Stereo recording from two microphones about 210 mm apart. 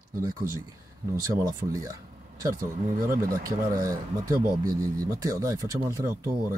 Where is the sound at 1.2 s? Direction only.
15° right (ahead or behind).